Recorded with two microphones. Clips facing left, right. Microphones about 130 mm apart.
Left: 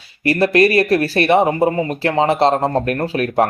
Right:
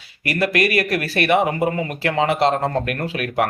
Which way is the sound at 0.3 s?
30° left (ahead or behind).